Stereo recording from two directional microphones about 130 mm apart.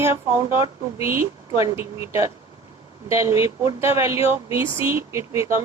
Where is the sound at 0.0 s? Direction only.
20° right (ahead or behind).